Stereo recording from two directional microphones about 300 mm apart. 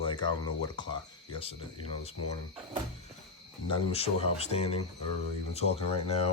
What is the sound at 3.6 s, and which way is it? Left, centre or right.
Speech, centre.